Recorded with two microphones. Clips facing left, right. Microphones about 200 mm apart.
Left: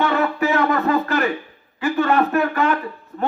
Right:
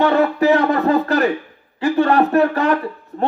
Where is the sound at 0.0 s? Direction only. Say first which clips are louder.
Right 5 dB; 35° right (ahead or behind).